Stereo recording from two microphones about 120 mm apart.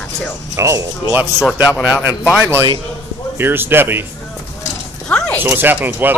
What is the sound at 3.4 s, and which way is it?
Speech, 20° right (ahead or behind).